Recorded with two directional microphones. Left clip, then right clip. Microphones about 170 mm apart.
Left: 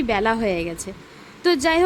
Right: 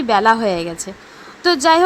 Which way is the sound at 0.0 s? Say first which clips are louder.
Right 7 dB; 5° left (ahead or behind).